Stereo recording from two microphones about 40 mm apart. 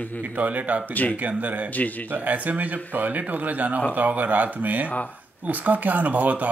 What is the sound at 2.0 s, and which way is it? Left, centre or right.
Speech, right.